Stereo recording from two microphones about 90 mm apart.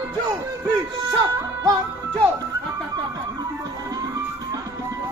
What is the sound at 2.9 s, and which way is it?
Music, 45° right (ahead or behind).